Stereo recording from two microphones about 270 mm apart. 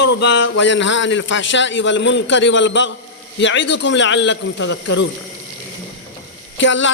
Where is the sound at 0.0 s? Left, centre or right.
Left.